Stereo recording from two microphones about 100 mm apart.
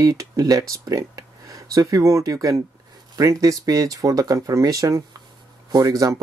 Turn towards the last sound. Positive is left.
turn(degrees=-35)  # may be behind; listen again after turning